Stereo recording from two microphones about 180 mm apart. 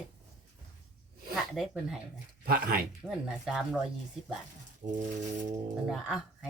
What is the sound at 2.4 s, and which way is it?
Speech, 55° right (ahead or behind).